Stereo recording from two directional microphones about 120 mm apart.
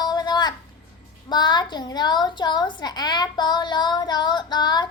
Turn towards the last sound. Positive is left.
turn(degrees=35)  # may be behind; listen again after turning